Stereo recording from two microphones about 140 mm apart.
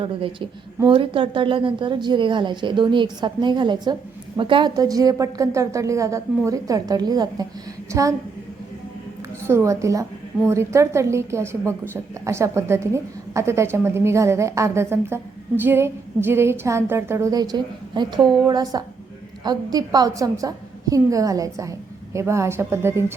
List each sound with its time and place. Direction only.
0.0 s a woman's voice: 40° right (ahead or behind)
9.5 s a woman's voice: 20° right (ahead or behind)